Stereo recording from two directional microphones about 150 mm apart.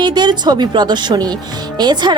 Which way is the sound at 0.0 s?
30° right (ahead or behind).